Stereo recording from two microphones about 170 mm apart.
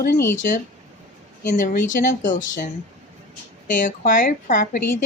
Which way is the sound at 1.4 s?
50° left (ahead or behind).